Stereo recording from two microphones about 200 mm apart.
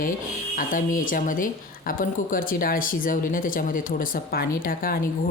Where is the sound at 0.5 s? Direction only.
40° left (ahead or behind).